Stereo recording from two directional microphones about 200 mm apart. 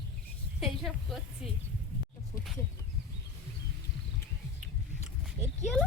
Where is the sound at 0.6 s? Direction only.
Centre (ahead or behind).